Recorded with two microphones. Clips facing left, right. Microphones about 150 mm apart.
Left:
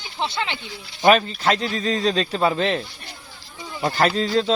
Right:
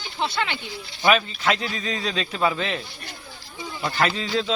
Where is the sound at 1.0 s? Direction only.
40° left (ahead or behind).